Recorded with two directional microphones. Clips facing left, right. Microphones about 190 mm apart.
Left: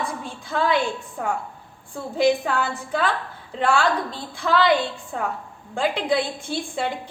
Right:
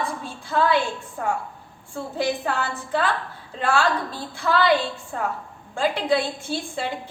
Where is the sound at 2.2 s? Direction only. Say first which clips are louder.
Left 5 dB; 15° left (ahead or behind).